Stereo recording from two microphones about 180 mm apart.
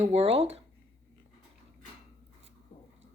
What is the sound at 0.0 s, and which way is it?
Speech, 35° right (ahead or behind).